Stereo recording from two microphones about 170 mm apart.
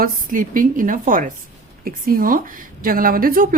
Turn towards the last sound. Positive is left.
turn(degrees=-55)  # may be behind; listen again after turning